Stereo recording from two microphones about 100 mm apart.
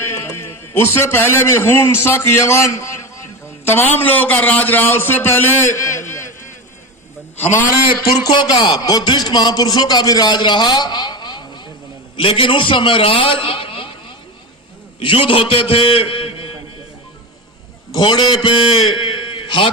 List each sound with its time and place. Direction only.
0.0 s a man's voice: 25° left (ahead or behind)
8.2 s speech: 45° left (ahead or behind)
12.1 s a man's voice: 60° left (ahead or behind)
15.0 s a man's voice: 60° left (ahead or behind)
17.9 s a man's voice: 45° left (ahead or behind)